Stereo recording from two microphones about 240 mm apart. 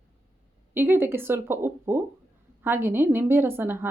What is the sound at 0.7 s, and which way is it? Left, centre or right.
Speech, centre.